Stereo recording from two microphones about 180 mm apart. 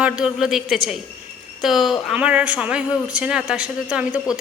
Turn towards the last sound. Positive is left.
turn(degrees=-5)  # may be behind; listen again after turning